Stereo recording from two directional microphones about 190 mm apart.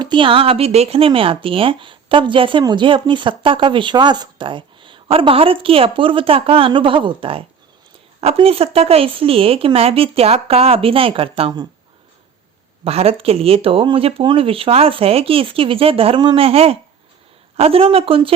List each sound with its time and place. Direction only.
0.0 s speech: 25° right (ahead or behind)
12.8 s speech: 30° right (ahead or behind)